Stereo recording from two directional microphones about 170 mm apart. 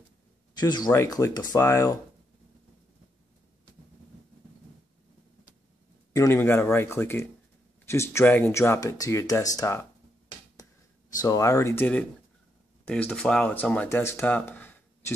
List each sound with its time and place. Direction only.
0.6 s speech: 25° left (ahead or behind)
6.1 s speech: 15° left (ahead or behind)
11.1 s speech: 20° left (ahead or behind)